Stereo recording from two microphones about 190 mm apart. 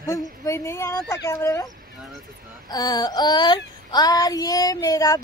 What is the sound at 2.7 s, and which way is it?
A woman's voice, 20° left (ahead or behind).